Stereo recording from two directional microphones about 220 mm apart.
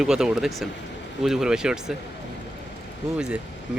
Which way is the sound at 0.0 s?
5° right (ahead or behind).